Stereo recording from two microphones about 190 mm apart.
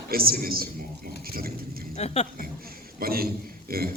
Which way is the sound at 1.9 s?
35° left (ahead or behind).